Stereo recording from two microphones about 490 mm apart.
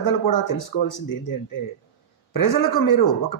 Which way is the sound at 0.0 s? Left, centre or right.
Left.